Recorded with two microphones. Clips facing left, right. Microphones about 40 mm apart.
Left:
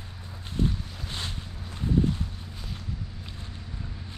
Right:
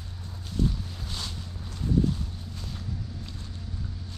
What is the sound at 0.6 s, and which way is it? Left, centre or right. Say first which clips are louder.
Boat: even; left.